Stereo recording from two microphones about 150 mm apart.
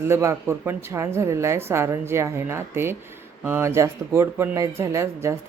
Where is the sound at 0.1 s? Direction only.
20° right (ahead or behind).